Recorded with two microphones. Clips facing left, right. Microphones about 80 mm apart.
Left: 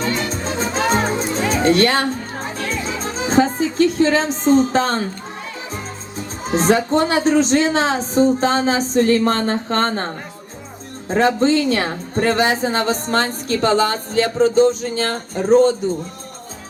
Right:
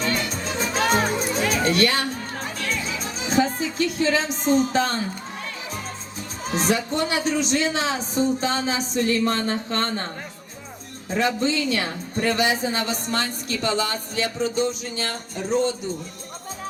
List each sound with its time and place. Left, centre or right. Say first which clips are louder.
0.0 s music: left 4 dB; left
6.4 s a woman's voice: left 7 dB; left
11.1 s a woman's voice: left 7 dB; left